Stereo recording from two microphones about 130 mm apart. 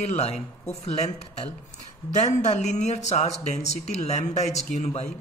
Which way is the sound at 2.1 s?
65° left (ahead or behind).